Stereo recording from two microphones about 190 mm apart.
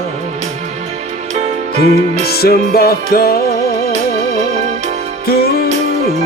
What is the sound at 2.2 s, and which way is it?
Music, 55° left (ahead or behind).